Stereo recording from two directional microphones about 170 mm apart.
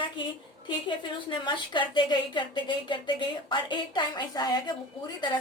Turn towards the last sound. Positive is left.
turn(degrees=25)  # may be behind; listen again after turning